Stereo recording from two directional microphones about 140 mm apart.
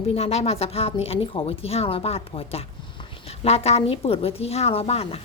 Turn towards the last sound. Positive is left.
turn(degrees=45)  # may be behind; listen again after turning